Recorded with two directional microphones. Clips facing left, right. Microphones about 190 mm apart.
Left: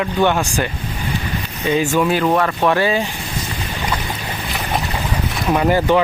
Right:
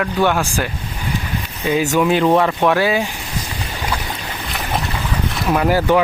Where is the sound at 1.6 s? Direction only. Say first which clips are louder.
Even; 10° right (ahead or behind).